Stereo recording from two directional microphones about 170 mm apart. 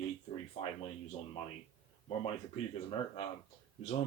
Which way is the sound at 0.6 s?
35° left (ahead or behind).